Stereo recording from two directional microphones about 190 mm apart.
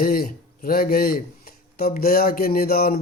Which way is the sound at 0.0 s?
50° left (ahead or behind).